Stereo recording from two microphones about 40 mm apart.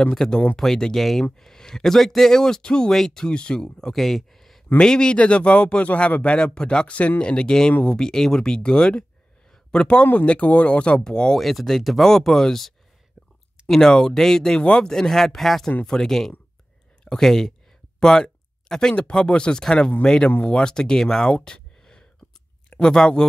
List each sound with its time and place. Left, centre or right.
0.2 s a man's voice: left
0.6 s speech: centre
3.9 s speech: centre
4.7 s a man's voice: left
9.5 s a sound: centre
10.1 s speech: left
11.0 s speech: centre
11.3 s speech: centre
13.7 s speech: centre
18.0 s a sound: centre
18.9 s a man's voice: left
21.3 s a sound: left
22.7 s speech: left